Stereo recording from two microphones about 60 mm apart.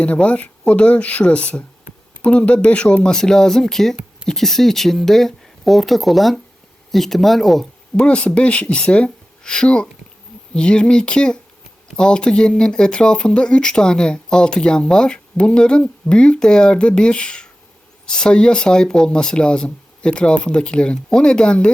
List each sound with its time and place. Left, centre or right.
0.0 s speech: left; by 7.7 s centre
7.9 s speech: centre